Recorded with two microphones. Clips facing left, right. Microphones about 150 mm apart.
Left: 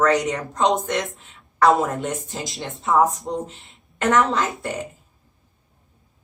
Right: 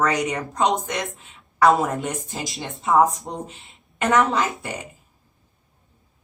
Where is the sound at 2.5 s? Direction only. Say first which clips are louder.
Even; centre (ahead or behind).